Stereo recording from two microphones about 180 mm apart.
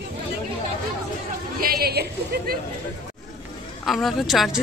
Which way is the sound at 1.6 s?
55° right (ahead or behind).